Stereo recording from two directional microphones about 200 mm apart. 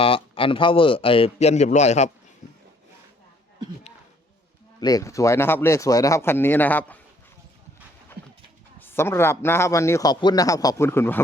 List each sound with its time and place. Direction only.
0.0 s a man's voice: 25° left (ahead or behind)
4.8 s a man's voice: 20° left (ahead or behind)
8.8 s a man's voice: 10° left (ahead or behind)